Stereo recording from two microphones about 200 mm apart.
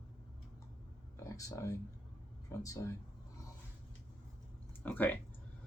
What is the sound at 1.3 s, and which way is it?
Speech, 15° left (ahead or behind).